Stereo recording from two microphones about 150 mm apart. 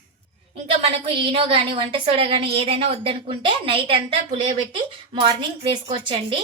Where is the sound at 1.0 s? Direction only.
40° right (ahead or behind).